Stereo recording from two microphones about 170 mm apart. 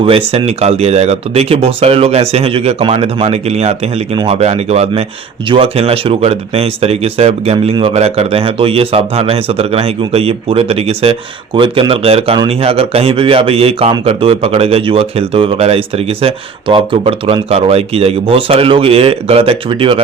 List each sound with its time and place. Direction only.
0.0 s speech: 35° right (ahead or behind)